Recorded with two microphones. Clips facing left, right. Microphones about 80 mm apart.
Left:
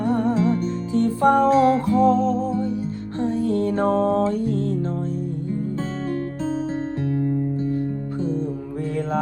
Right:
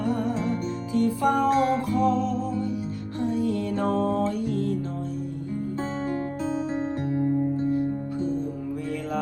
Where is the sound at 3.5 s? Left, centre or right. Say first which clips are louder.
Left 5 dB; left.